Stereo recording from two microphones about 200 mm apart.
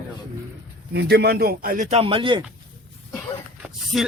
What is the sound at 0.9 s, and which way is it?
A man's voice, 55° right (ahead or behind).